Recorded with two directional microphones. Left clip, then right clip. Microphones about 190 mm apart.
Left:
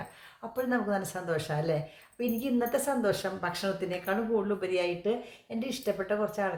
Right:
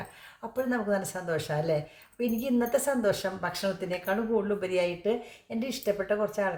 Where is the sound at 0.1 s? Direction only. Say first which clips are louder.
Right 2 dB; 5° right (ahead or behind).